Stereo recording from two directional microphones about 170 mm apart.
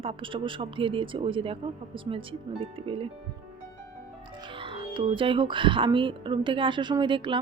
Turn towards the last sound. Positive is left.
turn(degrees=-30)  # may be behind; listen again after turning